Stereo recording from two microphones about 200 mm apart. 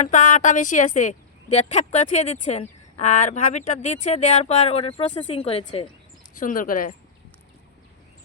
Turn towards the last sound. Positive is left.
turn(degrees=45)  # may be behind; listen again after turning